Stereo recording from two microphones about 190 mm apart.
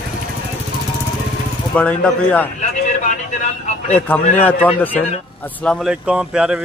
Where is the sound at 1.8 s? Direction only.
5° left (ahead or behind).